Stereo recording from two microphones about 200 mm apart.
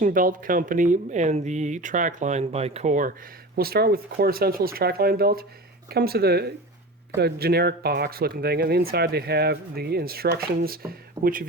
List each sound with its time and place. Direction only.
0.0 s speech: 45° right (ahead or behind)
3.5 s speech: 50° right (ahead or behind)